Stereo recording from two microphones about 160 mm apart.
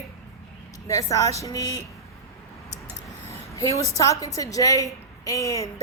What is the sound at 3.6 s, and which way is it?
A woman's voice, 20° left (ahead or behind).